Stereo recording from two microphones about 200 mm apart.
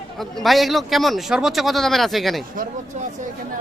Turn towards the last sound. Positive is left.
turn(degrees=-45)  # may be behind; listen again after turning